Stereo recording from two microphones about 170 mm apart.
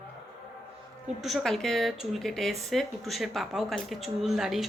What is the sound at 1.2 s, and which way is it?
Speech, centre (ahead or behind).